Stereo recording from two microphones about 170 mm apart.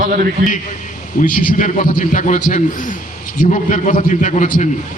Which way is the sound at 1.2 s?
50° left (ahead or behind).